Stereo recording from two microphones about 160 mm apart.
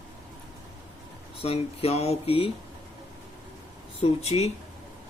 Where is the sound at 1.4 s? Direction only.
40° left (ahead or behind).